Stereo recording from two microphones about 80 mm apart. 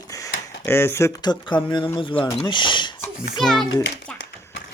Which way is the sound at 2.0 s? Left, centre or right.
Left.